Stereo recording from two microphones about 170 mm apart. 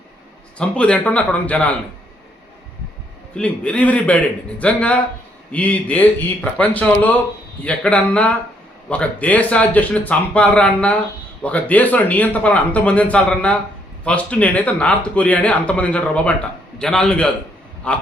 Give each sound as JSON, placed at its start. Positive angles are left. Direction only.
{"t": 0.6, "sound": "a man's voice", "side_deg": 5}
{"t": 3.3, "sound": "a man's voice", "side_deg": 5}